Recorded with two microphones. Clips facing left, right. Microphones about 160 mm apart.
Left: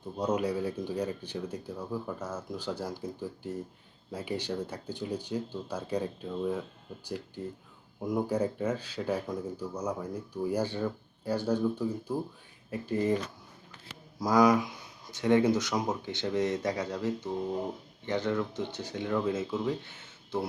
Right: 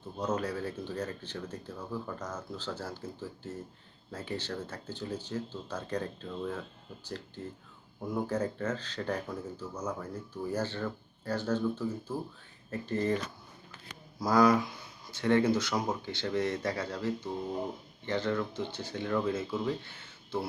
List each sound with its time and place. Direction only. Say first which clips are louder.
0.2 s speech: left 3 dB; 10° left (ahead or behind)
14.2 s speech: left 1 dB; 15° left (ahead or behind)